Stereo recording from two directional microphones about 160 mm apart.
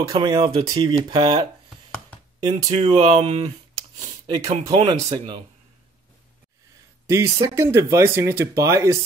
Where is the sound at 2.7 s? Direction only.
40° right (ahead or behind).